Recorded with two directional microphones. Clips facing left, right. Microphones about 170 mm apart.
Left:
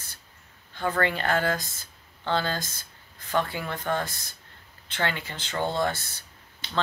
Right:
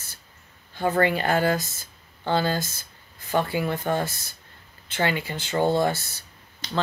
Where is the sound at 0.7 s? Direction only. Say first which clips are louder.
Right 4 dB; 10° right (ahead or behind).